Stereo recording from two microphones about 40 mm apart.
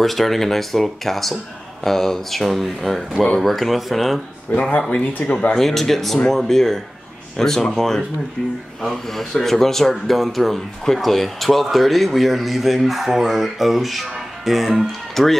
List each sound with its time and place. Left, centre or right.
0.0 s speech: centre
4.5 s speech: left
5.6 s speech: centre
15.2 s speech: centre